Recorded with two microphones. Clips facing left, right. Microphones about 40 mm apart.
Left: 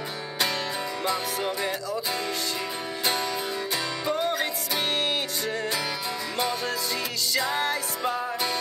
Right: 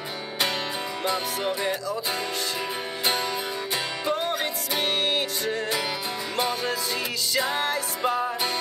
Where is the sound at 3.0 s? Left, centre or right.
Centre.